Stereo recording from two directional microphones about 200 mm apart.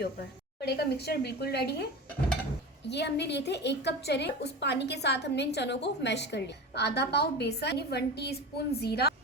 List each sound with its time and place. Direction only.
0.7 s a woman's voice: 55° left (ahead or behind)